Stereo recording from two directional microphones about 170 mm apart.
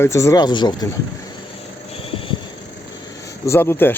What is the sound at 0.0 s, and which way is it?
Speech, 15° left (ahead or behind).